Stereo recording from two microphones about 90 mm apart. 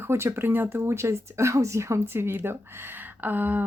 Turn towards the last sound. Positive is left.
turn(degrees=-20)  # may be behind; listen again after turning